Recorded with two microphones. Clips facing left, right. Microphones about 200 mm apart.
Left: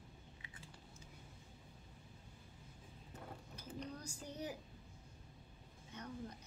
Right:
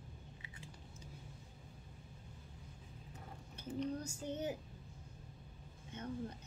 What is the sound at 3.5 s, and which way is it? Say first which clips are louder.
A woman's voice: right 9 dB; 25° right (ahead or behind).